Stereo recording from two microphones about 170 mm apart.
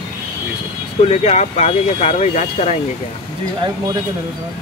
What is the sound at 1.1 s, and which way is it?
Speech, 40° left (ahead or behind).